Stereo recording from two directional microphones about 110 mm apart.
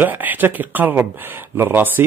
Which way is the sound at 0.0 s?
15° right (ahead or behind).